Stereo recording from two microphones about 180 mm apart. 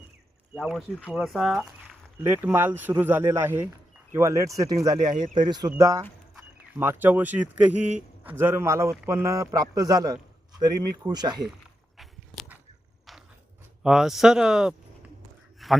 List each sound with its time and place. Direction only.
0.5 s speech: centre (ahead or behind); by 11.4 s 25° right (ahead or behind)
11.9 s walk: centre (ahead or behind)
13.8 s speech: 5° right (ahead or behind)
15.6 s a sound: centre (ahead or behind)